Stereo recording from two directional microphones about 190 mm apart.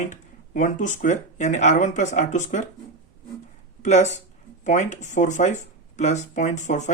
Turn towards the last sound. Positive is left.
turn(degrees=40)  # may be behind; listen again after turning